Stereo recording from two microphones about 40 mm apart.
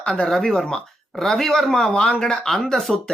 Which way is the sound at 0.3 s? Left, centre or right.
Centre.